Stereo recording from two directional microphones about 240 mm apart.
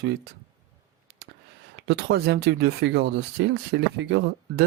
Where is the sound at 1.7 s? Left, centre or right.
Right.